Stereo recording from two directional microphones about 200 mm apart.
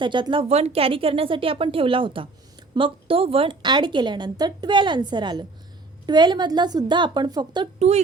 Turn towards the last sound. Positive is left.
turn(degrees=-35)  # may be behind; listen again after turning